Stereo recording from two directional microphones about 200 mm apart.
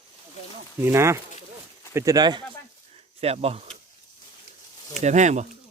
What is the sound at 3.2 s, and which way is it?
Speech, 30° right (ahead or behind).